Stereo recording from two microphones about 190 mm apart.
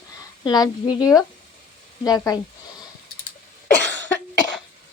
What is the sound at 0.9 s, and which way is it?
Speech, 5° right (ahead or behind).